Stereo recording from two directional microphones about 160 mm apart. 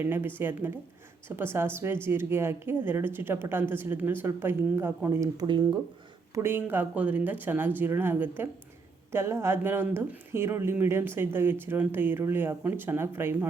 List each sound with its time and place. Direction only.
0.0 s a woman's voice: 15° right (ahead or behind)
5.5 s speech: 30° right (ahead or behind)
6.3 s a woman's voice: 15° right (ahead or behind)